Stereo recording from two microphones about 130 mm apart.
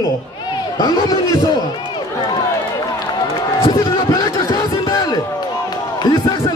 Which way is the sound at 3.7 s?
40° left (ahead or behind).